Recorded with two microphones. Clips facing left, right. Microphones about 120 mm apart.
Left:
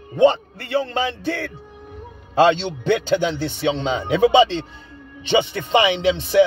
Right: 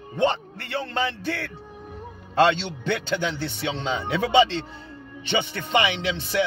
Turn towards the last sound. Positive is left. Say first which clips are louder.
# left 9 dB
turn(degrees=20)  # may be behind; listen again after turning